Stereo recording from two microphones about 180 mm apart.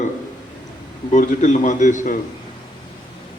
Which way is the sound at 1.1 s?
45° left (ahead or behind).